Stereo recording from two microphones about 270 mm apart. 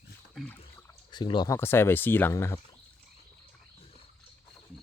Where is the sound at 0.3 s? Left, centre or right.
Centre.